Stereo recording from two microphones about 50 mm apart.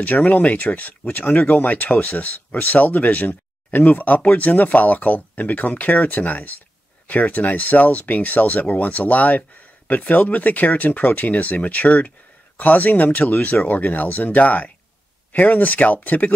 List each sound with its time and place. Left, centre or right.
0.0 s speech: left